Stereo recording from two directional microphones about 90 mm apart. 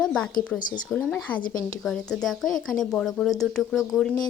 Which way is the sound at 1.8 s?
5° left (ahead or behind).